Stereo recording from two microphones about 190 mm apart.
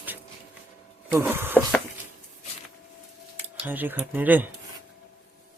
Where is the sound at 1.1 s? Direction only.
10° right (ahead or behind).